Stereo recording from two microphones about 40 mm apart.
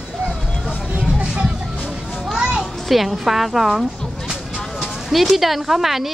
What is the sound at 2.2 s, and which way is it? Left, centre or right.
A child's voice, centre.